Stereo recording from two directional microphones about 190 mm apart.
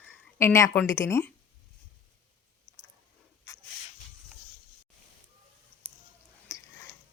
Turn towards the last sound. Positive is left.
turn(degrees=15)  # may be behind; listen again after turning